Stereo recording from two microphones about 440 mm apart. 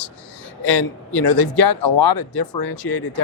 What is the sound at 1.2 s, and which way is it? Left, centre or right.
Speech, left.